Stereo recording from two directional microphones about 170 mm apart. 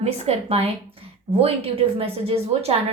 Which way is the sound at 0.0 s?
35° right (ahead or behind).